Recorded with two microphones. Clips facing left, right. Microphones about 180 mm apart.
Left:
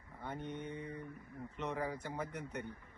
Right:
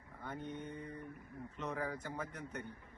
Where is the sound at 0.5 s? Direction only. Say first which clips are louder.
Left 2 dB; 15° left (ahead or behind).